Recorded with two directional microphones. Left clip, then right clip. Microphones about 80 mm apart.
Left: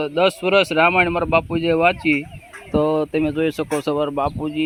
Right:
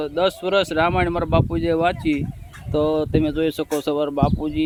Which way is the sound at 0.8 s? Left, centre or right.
Centre.